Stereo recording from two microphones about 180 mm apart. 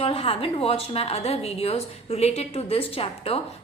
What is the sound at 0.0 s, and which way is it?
A woman's voice, 30° left (ahead or behind).